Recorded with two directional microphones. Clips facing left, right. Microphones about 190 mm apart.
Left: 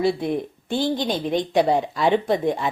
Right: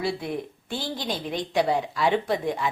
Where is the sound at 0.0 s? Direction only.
20° left (ahead or behind).